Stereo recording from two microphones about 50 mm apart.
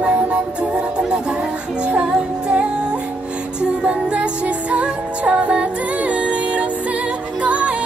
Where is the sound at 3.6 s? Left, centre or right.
Right.